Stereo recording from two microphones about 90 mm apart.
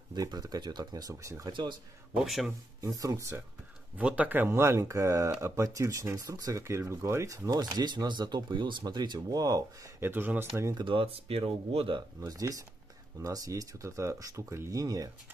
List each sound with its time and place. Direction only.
0.1 s speech: 50° right (ahead or behind)
1.5 s a man's voice: 55° right (ahead or behind)
2.2 s speech: centre (ahead or behind)
2.9 s speech: 40° right (ahead or behind)
3.9 s speech: 15° right (ahead or behind); by 9.7 s 45° right (ahead or behind)
9.9 s speech: 25° right (ahead or behind)
10.8 s speech: 70° right (ahead or behind)
12.2 s speech: 40° right (ahead or behind)